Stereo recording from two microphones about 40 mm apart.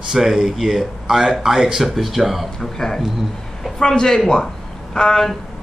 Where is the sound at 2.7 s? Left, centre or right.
Centre.